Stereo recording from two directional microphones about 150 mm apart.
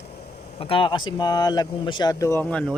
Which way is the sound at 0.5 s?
35° left (ahead or behind).